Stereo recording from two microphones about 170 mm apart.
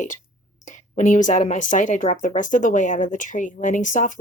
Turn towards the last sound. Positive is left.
turn(degrees=50)  # may be behind; listen again after turning